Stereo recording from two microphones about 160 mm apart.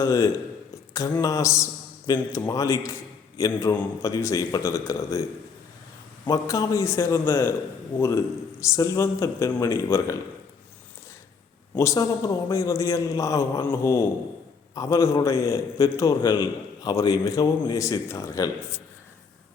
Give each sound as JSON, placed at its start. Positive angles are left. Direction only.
{"t": 0.0, "sound": "a man's voice", "side_deg": 20}
{"t": 6.2, "sound": "a man's voice", "side_deg": 20}
{"t": 11.7, "sound": "a man's voice", "side_deg": 20}